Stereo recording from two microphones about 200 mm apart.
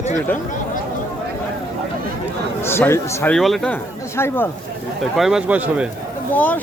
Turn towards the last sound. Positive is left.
turn(degrees=10)  # may be behind; listen again after turning